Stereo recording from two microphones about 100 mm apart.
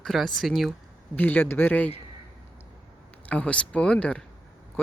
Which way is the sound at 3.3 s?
10° left (ahead or behind).